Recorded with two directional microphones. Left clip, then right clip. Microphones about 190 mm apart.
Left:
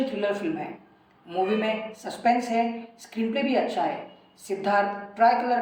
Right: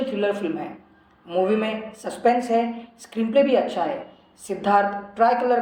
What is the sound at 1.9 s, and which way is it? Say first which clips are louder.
A man's voice: right 6 dB; 30° right (ahead or behind).